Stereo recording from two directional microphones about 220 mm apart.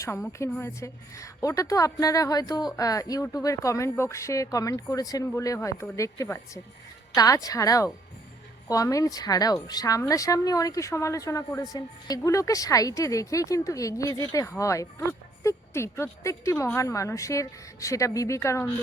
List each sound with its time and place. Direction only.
0.3 s a woman's voice: 10° left (ahead or behind)